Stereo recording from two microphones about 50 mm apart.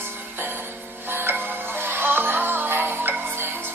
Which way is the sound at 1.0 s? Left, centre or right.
Right.